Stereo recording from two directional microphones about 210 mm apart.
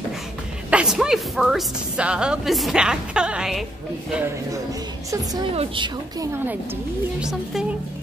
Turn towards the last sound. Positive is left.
turn(degrees=-5)  # may be behind; listen again after turning